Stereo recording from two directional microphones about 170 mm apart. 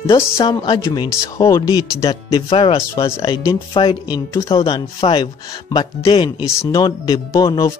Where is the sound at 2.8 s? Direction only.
15° left (ahead or behind).